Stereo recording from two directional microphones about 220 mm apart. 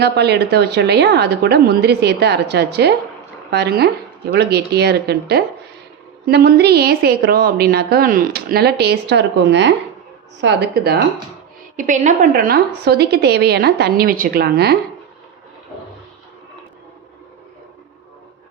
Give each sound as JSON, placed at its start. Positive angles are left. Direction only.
{"t": 0.0, "sound": "a woman's voice", "side_deg": -50}
{"t": 11.8, "sound": "a woman's voice", "side_deg": -35}